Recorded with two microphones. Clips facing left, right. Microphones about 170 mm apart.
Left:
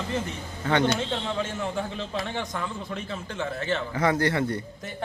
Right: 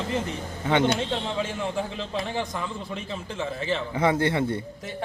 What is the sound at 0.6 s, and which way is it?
Speech, 20° right (ahead or behind).